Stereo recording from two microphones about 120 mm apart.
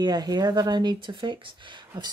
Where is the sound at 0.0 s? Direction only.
35° right (ahead or behind).